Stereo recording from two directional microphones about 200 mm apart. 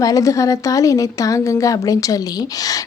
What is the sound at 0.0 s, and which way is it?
A woman's voice, 15° left (ahead or behind).